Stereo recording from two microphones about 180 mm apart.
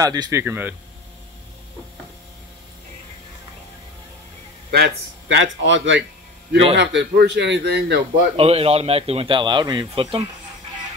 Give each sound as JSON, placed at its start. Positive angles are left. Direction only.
{"t": 0.0, "sound": "a man's voice", "side_deg": -20}
{"t": 4.6, "sound": "a man's voice", "side_deg": -60}
{"t": 5.7, "sound": "speech", "side_deg": -90}
{"t": 6.8, "sound": "a man's voice", "side_deg": -70}
{"t": 8.1, "sound": "speech", "side_deg": -35}